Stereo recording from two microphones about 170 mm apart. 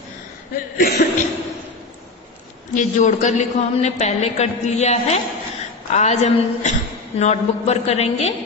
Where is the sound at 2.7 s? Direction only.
45° left (ahead or behind).